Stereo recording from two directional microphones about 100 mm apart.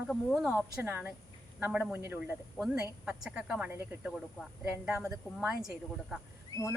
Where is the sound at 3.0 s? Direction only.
10° right (ahead or behind).